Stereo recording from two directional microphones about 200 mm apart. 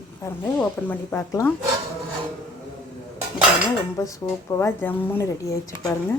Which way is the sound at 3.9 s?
15° left (ahead or behind).